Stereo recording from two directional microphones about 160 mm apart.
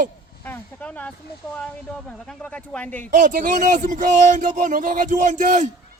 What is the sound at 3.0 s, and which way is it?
Speech, 55° right (ahead or behind).